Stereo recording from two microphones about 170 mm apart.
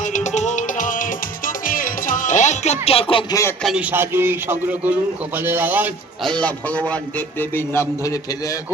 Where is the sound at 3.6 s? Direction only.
Centre (ahead or behind).